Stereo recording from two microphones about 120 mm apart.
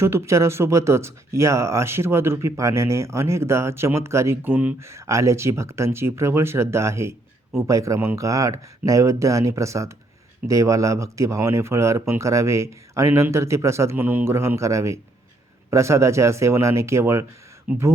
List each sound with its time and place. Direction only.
0.0 s speech: 25° right (ahead or behind)